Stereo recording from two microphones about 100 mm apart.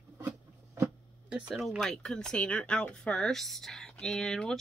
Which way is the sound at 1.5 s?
Centre (ahead or behind).